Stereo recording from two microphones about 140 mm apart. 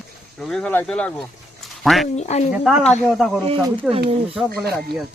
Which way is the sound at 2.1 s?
55° left (ahead or behind).